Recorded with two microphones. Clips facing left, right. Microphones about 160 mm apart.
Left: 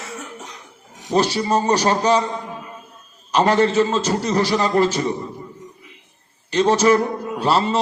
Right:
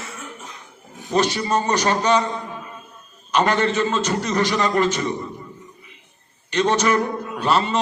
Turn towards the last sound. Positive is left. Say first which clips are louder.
# left 2 dB
turn(degrees=30)  # may be behind; listen again after turning